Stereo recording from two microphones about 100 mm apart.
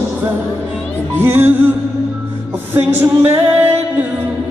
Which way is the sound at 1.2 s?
20° right (ahead or behind).